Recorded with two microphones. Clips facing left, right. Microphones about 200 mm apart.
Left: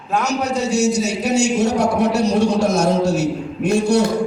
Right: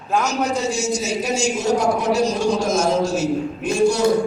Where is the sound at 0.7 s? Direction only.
65° left (ahead or behind).